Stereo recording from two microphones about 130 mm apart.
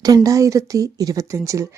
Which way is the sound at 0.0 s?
30° right (ahead or behind).